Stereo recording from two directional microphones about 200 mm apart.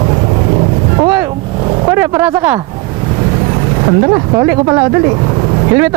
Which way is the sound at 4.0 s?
20° right (ahead or behind).